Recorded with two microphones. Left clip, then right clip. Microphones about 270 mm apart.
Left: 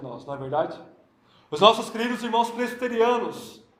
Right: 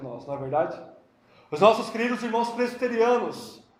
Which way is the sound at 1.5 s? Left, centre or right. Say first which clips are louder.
Left 1 dB; left.